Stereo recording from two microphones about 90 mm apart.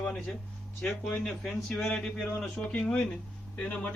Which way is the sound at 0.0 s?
10° left (ahead or behind).